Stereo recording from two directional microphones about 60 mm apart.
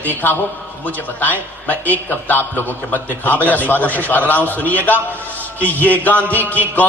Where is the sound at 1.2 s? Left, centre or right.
Left.